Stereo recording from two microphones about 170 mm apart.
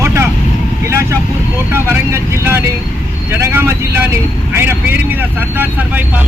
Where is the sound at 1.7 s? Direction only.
15° right (ahead or behind).